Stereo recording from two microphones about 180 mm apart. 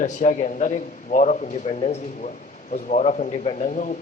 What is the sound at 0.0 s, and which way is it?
A man's voice, 40° left (ahead or behind).